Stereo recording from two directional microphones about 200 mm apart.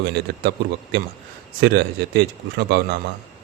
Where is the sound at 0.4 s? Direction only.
55° right (ahead or behind).